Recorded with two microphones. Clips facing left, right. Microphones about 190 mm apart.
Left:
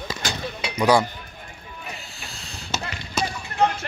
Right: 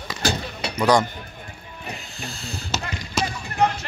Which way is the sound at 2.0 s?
Centre (ahead or behind).